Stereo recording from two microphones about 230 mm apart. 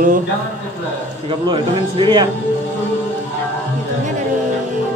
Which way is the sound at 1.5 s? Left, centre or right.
Right.